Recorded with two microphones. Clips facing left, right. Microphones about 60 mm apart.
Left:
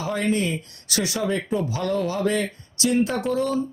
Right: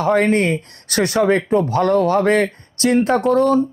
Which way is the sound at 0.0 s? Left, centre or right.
Right.